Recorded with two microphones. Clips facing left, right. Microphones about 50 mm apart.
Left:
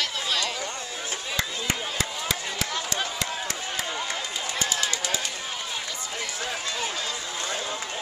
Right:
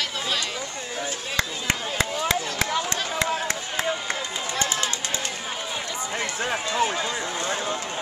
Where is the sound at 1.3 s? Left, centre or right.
Right.